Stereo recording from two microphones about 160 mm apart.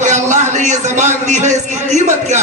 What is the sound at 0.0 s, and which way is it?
A man's voice, 50° right (ahead or behind).